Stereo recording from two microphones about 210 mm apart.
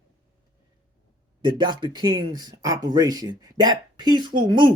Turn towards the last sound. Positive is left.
turn(degrees=-20)  # may be behind; listen again after turning